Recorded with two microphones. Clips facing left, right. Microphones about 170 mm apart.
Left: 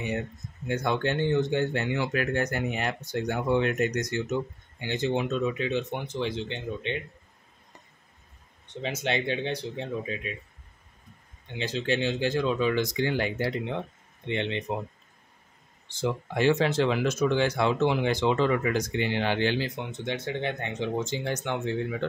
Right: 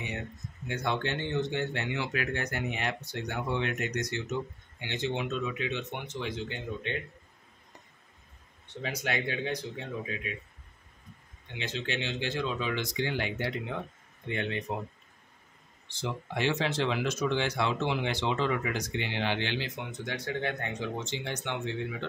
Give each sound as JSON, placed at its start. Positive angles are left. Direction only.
{"t": 0.7, "sound": "speech", "side_deg": 45}
{"t": 8.6, "sound": "speech", "side_deg": 25}
{"t": 11.5, "sound": "speech", "side_deg": 35}
{"t": 14.2, "sound": "speech", "side_deg": 25}
{"t": 15.9, "sound": "speech", "side_deg": 45}
{"t": 21.0, "sound": "speech", "side_deg": 45}